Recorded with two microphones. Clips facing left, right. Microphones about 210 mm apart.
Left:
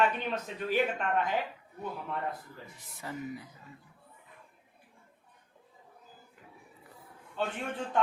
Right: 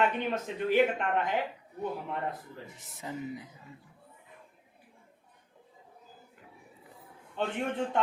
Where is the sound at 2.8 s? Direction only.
20° right (ahead or behind).